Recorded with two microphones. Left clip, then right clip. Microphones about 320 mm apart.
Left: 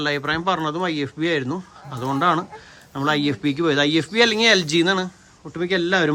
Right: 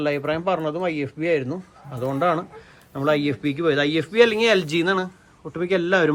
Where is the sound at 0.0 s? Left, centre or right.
Centre.